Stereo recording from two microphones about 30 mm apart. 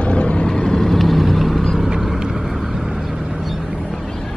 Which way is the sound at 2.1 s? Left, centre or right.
Centre.